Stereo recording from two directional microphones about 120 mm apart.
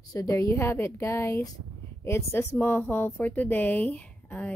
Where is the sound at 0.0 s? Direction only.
30° left (ahead or behind).